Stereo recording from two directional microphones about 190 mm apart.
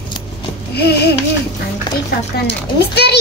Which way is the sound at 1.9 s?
25° left (ahead or behind).